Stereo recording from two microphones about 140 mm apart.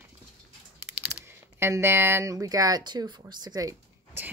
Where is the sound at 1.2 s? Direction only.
15° right (ahead or behind).